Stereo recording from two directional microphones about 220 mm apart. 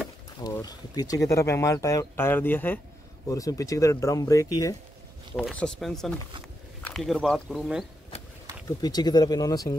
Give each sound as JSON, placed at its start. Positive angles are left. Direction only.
{"t": 0.4, "sound": "speech", "side_deg": 15}
{"t": 5.3, "sound": "speech", "side_deg": 0}
{"t": 8.6, "sound": "speech", "side_deg": 20}